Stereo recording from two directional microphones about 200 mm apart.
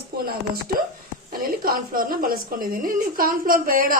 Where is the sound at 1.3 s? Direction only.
45° right (ahead or behind).